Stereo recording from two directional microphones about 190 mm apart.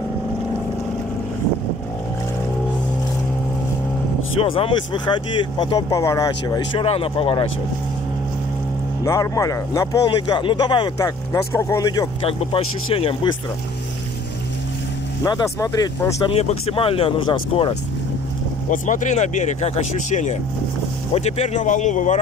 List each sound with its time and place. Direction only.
4.4 s speech: 30° left (ahead or behind)
6.9 s speech: 30° left (ahead or behind)
9.0 s speech: 15° left (ahead or behind)
15.2 s speech: 20° left (ahead or behind)
16.3 s speech: 30° left (ahead or behind)
18.7 s speech: 40° left (ahead or behind)